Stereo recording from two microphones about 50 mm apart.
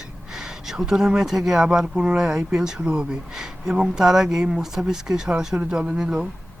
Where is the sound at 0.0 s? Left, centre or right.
Centre.